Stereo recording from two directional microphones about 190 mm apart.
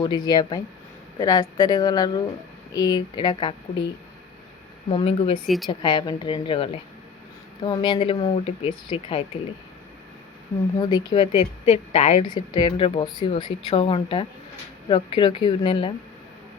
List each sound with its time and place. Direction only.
0.3 s speech: 20° left (ahead or behind)
4.9 s speech: 30° left (ahead or behind)
5.5 s a woman's voice: centre (ahead or behind)
5.9 s speech: 25° left (ahead or behind)
10.8 s a woman's voice: 20° left (ahead or behind)
12.3 s speech: 20° left (ahead or behind)